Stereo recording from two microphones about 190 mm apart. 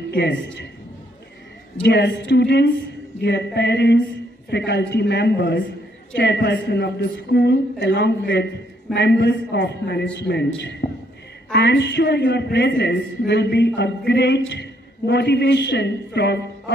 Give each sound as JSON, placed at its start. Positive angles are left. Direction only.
{"t": 0.1, "sound": "a woman's voice", "side_deg": 65}
{"t": 1.8, "sound": "a woman's voice", "side_deg": 65}